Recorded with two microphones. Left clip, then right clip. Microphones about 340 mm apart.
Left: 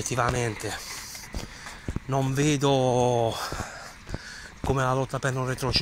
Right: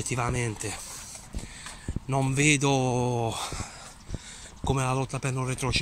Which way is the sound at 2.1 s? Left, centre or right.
Centre.